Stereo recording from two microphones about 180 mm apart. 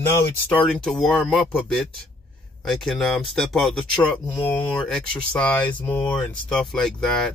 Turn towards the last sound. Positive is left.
turn(degrees=0)  # may be behind; listen again after turning